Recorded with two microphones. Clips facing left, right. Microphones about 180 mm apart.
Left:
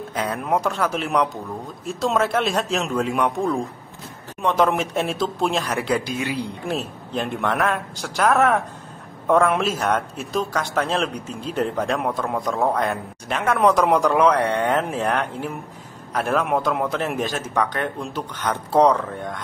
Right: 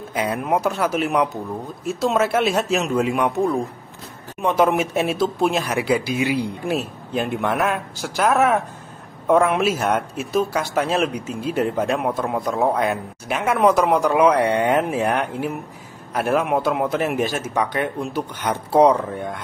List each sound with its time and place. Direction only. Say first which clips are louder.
0.1 s a man's voice: right 2 dB; 10° right (ahead or behind)